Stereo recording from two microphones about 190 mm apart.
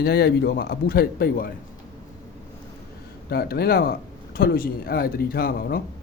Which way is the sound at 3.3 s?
55° left (ahead or behind).